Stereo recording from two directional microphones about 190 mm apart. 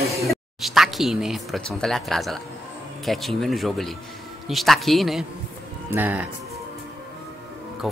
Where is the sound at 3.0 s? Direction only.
Centre (ahead or behind).